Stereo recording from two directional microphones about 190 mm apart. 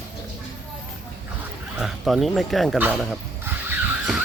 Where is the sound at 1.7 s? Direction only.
Centre (ahead or behind).